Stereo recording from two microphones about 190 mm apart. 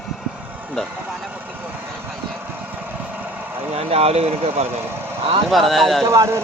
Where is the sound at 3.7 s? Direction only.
30° right (ahead or behind).